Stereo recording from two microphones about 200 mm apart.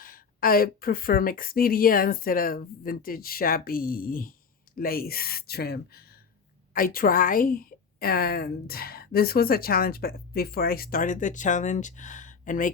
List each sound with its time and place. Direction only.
0.0 s a woman's voice: 45° left (ahead or behind)